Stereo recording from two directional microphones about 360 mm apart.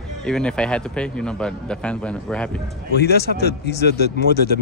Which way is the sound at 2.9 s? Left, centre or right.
Left.